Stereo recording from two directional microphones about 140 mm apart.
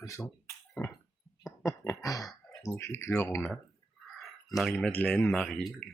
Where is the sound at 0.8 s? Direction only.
20° left (ahead or behind).